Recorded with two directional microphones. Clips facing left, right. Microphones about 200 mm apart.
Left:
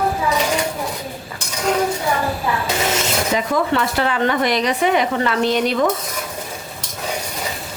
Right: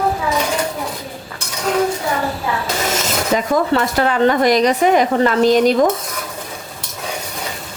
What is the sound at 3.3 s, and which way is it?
Speech, 40° right (ahead or behind).